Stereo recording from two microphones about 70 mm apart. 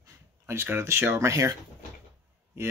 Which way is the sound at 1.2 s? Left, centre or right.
Right.